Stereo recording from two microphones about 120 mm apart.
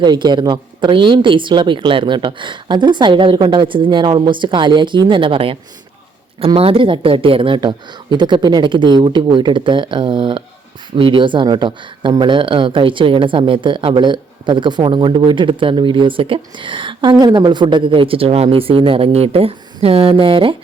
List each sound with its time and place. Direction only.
0.0 s speech: 35° right (ahead or behind)